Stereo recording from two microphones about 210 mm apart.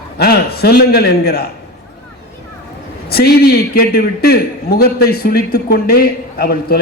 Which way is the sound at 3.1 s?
50° left (ahead or behind).